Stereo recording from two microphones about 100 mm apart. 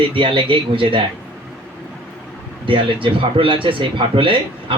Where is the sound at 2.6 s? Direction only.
60° right (ahead or behind).